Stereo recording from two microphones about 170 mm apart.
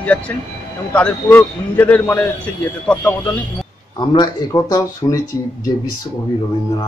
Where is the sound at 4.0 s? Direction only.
25° left (ahead or behind).